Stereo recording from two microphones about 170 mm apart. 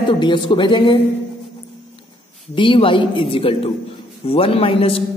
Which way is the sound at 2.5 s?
30° left (ahead or behind).